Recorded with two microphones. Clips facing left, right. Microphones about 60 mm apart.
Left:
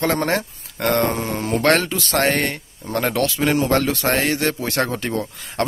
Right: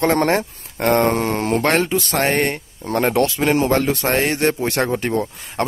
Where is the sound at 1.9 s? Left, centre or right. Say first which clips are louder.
Right 1 dB; right.